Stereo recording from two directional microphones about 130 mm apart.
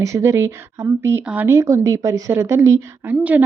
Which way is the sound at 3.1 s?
10° right (ahead or behind).